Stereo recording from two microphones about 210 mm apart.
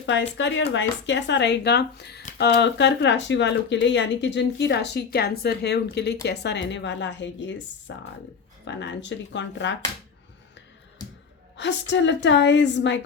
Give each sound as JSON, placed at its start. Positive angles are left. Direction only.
{"t": 0.0, "sound": "speech", "side_deg": 60}
{"t": 11.5, "sound": "speech", "side_deg": 55}